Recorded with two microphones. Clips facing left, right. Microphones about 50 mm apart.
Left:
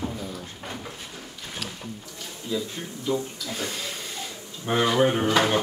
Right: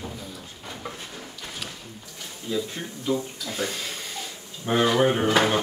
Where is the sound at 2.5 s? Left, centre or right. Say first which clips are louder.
Right 1 dB; centre.